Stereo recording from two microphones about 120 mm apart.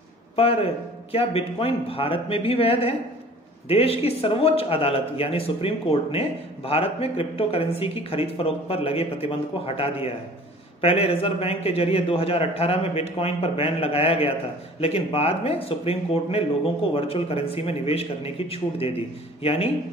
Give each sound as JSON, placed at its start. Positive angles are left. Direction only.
{"t": 0.4, "sound": "a man's voice", "side_deg": 55}